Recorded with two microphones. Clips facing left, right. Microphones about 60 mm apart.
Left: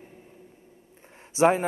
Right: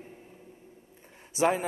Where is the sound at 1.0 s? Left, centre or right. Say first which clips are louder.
Left 2 dB; left.